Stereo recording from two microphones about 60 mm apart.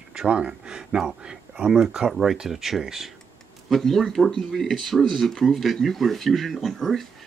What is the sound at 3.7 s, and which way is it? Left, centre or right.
Speech, centre.